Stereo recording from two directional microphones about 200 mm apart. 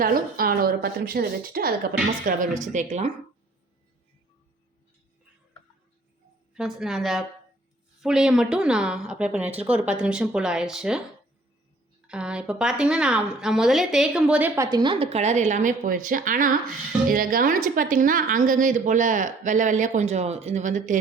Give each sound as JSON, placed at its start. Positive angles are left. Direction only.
{"t": 0.0, "sound": "speech", "side_deg": -45}
{"t": 2.7, "sound": "a woman's voice", "side_deg": -35}
{"t": 6.5, "sound": "speech", "side_deg": 0}
{"t": 12.0, "sound": "a woman's voice", "side_deg": -5}